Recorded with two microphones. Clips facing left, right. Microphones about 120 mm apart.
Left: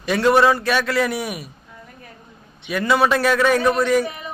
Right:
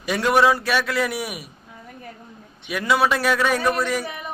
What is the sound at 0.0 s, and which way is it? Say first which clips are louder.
Speech: left 3 dB; 10° right (ahead or behind).